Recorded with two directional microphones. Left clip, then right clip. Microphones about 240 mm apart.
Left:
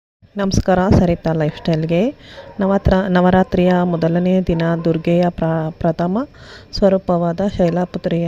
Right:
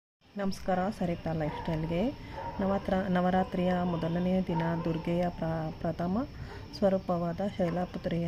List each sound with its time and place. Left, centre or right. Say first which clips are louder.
0.3 s speech: left 15 dB; left